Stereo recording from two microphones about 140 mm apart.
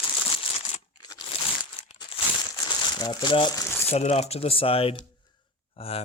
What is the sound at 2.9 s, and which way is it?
Speech, 30° left (ahead or behind).